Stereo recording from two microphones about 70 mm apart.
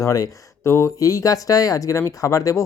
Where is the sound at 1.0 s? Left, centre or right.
Left.